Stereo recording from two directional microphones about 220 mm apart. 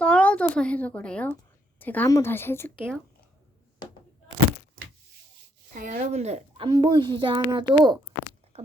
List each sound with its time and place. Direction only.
0.0 s a woman's voice: 5° left (ahead or behind)
5.7 s speech: 40° right (ahead or behind)
6.7 s a child's voice: 20° right (ahead or behind)